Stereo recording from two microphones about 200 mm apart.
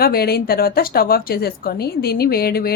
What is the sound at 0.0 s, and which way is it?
A woman's voice, 50° left (ahead or behind).